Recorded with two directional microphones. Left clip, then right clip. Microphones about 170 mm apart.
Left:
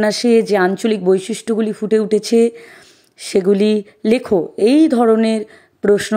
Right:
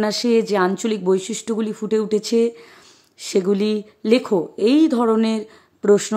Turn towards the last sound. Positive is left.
turn(degrees=20)  # may be behind; listen again after turning